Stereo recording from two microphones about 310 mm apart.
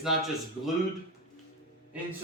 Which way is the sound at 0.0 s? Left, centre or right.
Centre.